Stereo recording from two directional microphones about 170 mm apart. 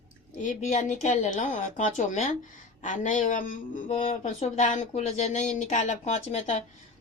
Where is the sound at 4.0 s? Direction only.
40° left (ahead or behind).